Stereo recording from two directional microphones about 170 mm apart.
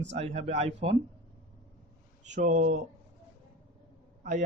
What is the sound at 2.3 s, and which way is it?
Speech, 50° right (ahead or behind).